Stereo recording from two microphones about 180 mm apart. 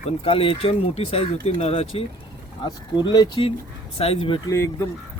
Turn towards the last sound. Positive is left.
turn(degrees=15)  # may be behind; listen again after turning